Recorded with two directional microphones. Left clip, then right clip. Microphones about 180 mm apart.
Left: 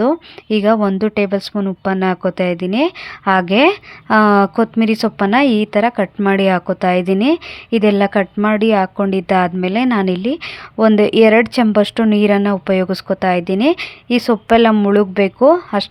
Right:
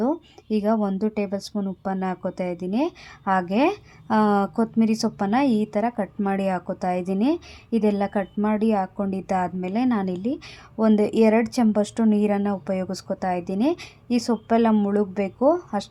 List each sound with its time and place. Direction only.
0.0 s a woman's voice: 20° left (ahead or behind)